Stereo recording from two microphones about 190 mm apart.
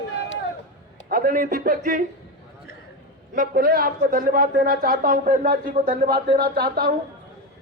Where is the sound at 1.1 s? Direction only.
45° right (ahead or behind).